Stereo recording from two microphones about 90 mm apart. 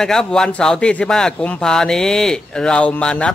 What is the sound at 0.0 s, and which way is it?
Speech, 5° left (ahead or behind).